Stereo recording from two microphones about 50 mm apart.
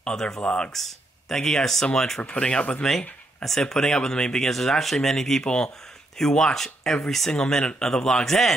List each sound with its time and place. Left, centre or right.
0.0 s speech: centre
0.7 s speech: centre
2.2 s speech: left
2.8 s speech: centre
4.5 s speech: centre